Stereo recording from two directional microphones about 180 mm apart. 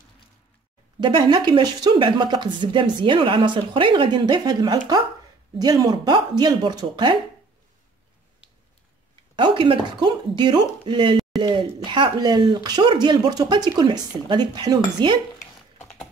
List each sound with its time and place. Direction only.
1.0 s speech: 25° right (ahead or behind)
9.3 s speech: 25° right (ahead or behind)
15.8 s a sound: 5° left (ahead or behind)